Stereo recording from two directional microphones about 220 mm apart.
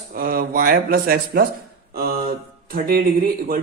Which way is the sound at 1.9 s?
45° right (ahead or behind).